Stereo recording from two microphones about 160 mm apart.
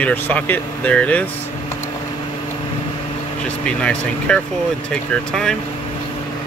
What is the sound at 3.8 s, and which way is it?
A man's voice, 5° left (ahead or behind).